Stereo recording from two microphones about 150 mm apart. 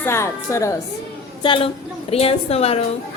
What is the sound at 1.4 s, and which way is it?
A woman's voice, 35° left (ahead or behind).